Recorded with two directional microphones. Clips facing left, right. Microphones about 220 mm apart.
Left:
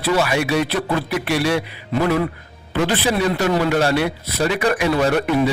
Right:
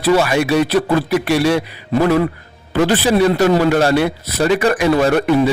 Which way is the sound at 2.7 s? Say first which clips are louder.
Right 5 dB; 45° right (ahead or behind).